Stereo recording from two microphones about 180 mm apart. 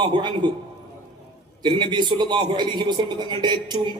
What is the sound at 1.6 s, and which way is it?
A man's voice, 25° right (ahead or behind).